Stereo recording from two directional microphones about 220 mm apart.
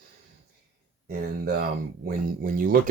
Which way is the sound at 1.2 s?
50° right (ahead or behind).